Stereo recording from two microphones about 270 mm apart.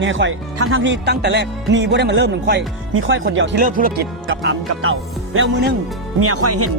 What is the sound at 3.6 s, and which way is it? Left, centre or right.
Speech, right.